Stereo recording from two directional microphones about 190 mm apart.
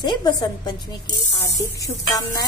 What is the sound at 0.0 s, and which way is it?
Speech, 20° left (ahead or behind).